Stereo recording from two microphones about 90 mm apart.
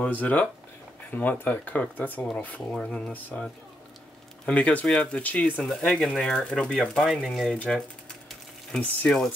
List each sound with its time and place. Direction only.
0.0 s speech: 15° left (ahead or behind)
3.1 s speech: 15° left (ahead or behind)
4.5 s speech: 15° left (ahead or behind)
7.5 s speech: 15° left (ahead or behind)
8.8 s speech: 20° left (ahead or behind)